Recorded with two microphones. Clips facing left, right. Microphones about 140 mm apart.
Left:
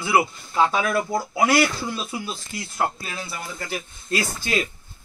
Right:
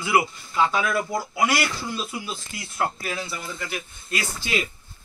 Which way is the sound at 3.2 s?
40° left (ahead or behind).